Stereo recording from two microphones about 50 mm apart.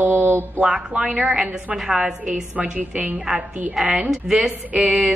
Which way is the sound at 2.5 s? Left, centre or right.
Right.